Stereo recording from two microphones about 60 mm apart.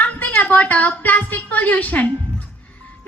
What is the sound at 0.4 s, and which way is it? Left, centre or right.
A woman's voice, left.